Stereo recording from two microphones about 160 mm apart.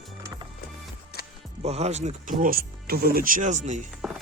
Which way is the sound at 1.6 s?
40° right (ahead or behind).